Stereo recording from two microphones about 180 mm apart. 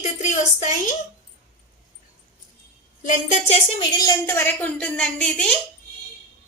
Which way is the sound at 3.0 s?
40° left (ahead or behind).